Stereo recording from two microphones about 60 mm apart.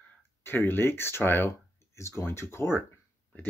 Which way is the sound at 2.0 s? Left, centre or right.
Left.